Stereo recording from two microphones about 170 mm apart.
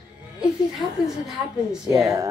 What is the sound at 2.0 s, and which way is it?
Speech, 15° right (ahead or behind).